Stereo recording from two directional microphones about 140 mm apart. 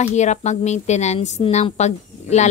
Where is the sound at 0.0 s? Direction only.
55° left (ahead or behind).